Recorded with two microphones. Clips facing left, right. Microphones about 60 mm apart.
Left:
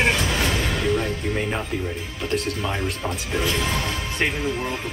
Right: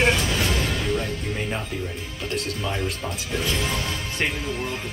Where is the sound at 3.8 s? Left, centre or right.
Centre.